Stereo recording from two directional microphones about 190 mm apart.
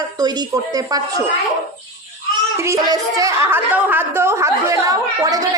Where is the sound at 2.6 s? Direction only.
15° right (ahead or behind).